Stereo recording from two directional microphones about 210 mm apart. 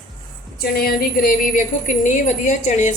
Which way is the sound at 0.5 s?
45° left (ahead or behind).